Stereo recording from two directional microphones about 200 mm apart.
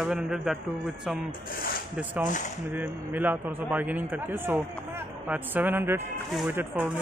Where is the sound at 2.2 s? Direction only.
40° left (ahead or behind).